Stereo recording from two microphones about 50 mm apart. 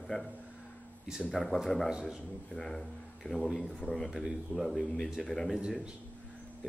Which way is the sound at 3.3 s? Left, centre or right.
Left.